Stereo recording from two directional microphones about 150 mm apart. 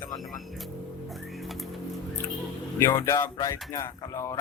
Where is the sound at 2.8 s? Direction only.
20° left (ahead or behind).